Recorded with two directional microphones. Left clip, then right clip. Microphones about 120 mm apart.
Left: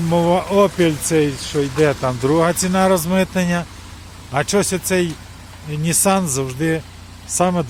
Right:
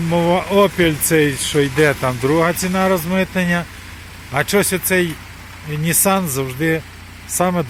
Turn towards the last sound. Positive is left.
turn(degrees=5)  # may be behind; listen again after turning